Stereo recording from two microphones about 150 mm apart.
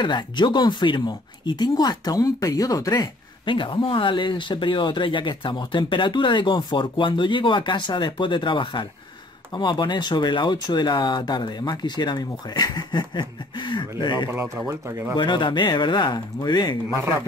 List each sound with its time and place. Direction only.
0.0 s speech: 30° left (ahead or behind)
14.3 s speech: 15° right (ahead or behind)
15.1 s speech: 30° left (ahead or behind)